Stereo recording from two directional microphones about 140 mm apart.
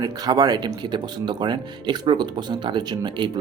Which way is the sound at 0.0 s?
25° right (ahead or behind).